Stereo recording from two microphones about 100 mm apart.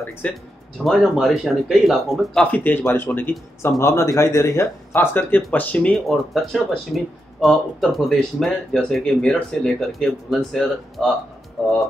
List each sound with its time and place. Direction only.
0.2 s speech: 15° left (ahead or behind)
0.8 s speech: centre (ahead or behind)
2.4 s speech: 15° left (ahead or behind)
6.0 s speech: centre (ahead or behind)